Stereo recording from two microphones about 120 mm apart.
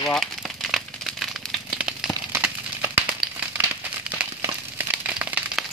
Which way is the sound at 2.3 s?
20° right (ahead or behind).